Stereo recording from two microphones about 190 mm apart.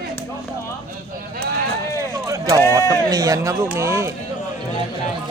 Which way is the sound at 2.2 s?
15° right (ahead or behind).